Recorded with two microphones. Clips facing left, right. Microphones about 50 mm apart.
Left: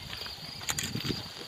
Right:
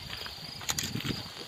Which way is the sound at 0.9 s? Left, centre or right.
Centre.